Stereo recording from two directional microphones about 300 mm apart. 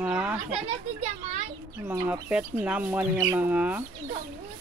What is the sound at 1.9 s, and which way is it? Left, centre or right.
Speech, centre.